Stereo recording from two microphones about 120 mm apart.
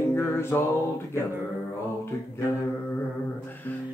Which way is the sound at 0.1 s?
20° left (ahead or behind).